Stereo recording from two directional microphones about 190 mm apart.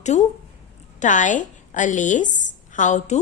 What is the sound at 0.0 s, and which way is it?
A woman's voice, 40° left (ahead or behind).